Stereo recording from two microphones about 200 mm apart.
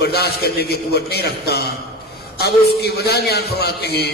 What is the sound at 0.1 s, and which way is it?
A man's voice, 55° left (ahead or behind).